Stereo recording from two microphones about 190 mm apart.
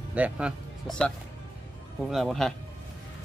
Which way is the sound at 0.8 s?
5° left (ahead or behind).